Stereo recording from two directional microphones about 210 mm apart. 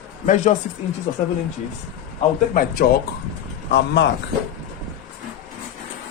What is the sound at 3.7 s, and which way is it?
Speech, 55° left (ahead or behind).